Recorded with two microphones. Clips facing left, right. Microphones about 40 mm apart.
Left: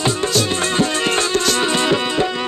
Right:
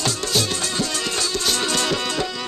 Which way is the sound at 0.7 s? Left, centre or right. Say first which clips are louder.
Left 7 dB; left.